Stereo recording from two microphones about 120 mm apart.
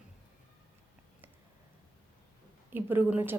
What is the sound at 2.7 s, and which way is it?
Speech, 15° right (ahead or behind).